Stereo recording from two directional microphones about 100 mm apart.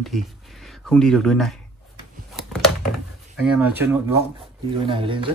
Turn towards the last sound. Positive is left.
turn(degrees=-55)  # may be behind; listen again after turning